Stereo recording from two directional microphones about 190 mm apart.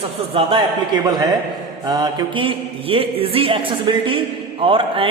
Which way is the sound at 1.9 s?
20° right (ahead or behind).